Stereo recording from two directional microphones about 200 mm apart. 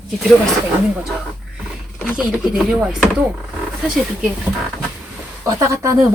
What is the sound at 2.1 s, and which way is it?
Speech, 5° right (ahead or behind).